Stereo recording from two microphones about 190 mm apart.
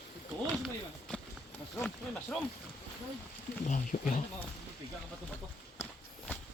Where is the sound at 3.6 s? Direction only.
40° left (ahead or behind).